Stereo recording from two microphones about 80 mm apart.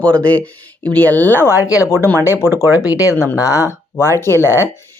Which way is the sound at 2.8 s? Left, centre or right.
Left.